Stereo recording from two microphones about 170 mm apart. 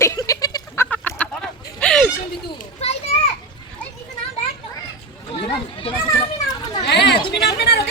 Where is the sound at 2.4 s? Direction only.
35° left (ahead or behind).